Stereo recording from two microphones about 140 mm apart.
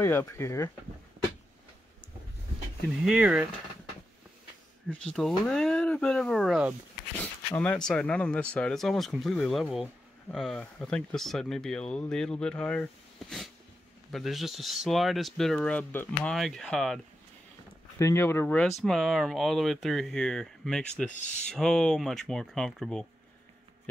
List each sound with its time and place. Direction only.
0.0 s speech: 20° left (ahead or behind)
2.9 s speech: 5° right (ahead or behind)
4.8 s speech: 5° left (ahead or behind)
7.5 s speech: 10° left (ahead or behind)
13.2 s a sound: centre (ahead or behind)
14.1 s speech: centre (ahead or behind)
17.9 s speech: 20° left (ahead or behind)
18.7 s speech: centre (ahead or behind)